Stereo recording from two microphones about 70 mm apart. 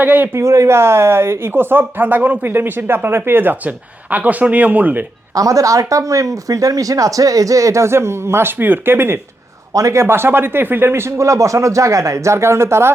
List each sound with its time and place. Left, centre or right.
0.0 s speech: right
0.3 s speech: right
5.3 s speech: right
9.7 s speech: right
11.2 s speech: right